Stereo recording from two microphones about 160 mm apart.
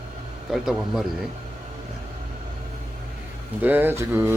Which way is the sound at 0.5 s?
5° right (ahead or behind).